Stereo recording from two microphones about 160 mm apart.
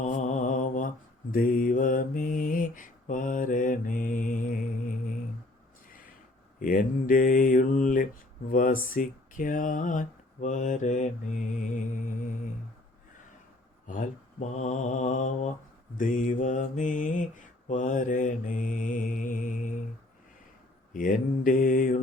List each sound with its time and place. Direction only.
0.0 s mantra: 50° left (ahead or behind)
6.6 s mantra: 60° left (ahead or behind)
8.4 s speech: 60° left (ahead or behind)
13.8 s speech: 50° left (ahead or behind)
17.7 s mantra: 50° left (ahead or behind)
20.9 s mantra: 60° left (ahead or behind)